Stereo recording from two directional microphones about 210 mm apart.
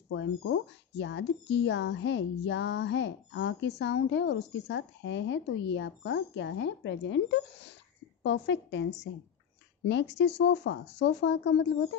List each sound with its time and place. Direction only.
0.1 s speech: 65° left (ahead or behind)